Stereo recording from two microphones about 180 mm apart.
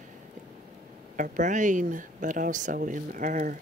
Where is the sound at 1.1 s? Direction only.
45° right (ahead or behind).